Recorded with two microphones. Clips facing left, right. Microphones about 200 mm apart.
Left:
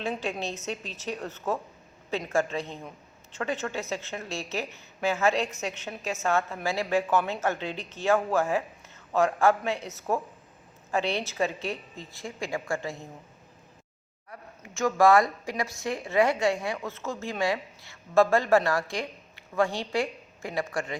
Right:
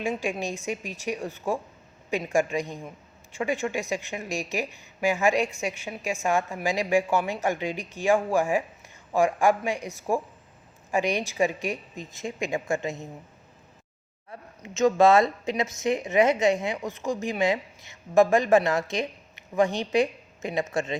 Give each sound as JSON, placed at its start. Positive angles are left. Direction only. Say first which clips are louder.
{"t": 0.0, "sound": "speech", "louder": "right 3 dB", "side_deg": -10}
{"t": 14.3, "sound": "speech", "louder": "right 3 dB", "side_deg": -20}